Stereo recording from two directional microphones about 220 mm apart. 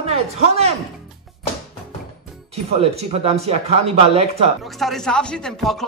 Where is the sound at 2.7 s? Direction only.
25° right (ahead or behind).